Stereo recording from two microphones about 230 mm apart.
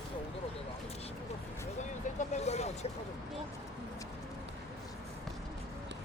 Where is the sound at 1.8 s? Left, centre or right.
Left.